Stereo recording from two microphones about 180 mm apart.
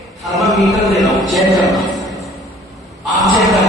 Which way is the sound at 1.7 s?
Centre (ahead or behind).